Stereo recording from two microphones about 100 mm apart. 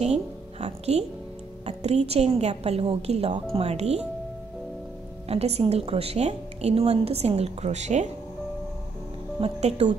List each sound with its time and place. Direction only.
0.0 s a woman's voice: 90° right
5.3 s a woman's voice: 90° right
9.4 s a woman's voice: 90° right